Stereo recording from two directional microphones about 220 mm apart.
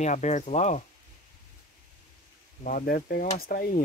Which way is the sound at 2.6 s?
40° left (ahead or behind).